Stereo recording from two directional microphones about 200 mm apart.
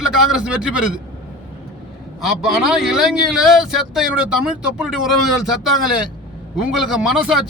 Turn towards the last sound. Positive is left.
turn(degrees=-5)  # may be behind; listen again after turning